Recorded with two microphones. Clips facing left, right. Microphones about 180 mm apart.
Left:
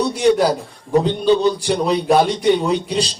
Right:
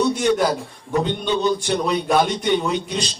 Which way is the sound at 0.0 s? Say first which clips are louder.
Left 3 dB; 35° left (ahead or behind).